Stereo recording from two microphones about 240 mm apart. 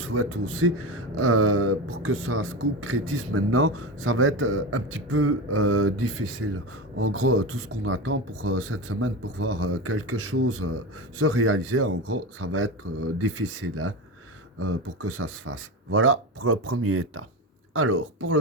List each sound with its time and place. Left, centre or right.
0.0 s speech: right